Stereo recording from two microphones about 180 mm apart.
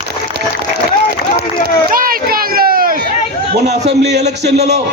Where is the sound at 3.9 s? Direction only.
65° right (ahead or behind).